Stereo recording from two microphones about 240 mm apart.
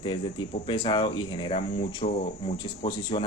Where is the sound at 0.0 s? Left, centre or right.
Centre.